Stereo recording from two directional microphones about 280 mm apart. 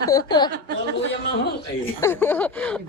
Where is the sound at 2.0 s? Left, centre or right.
Centre.